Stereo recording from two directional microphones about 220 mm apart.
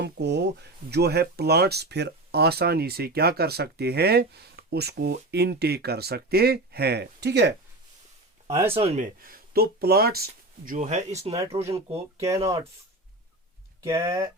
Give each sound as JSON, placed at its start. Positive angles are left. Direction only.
{"t": 0.0, "sound": "speech", "side_deg": -50}
{"t": 8.7, "sound": "speech", "side_deg": -30}
{"t": 10.7, "sound": "speech", "side_deg": -30}
{"t": 13.8, "sound": "speech", "side_deg": -15}